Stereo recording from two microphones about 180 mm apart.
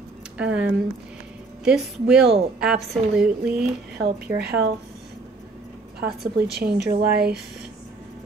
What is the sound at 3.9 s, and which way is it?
Speech, 60° right (ahead or behind).